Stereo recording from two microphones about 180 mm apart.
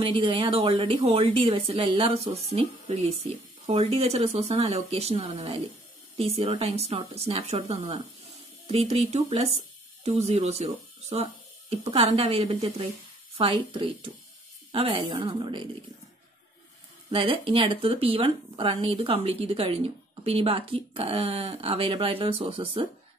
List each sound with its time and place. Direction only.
0.0 s a woman's voice: 30° right (ahead or behind)
17.1 s speech: 30° right (ahead or behind)